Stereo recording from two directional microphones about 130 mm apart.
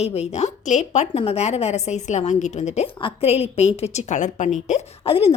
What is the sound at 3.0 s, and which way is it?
A woman's voice, 45° left (ahead or behind).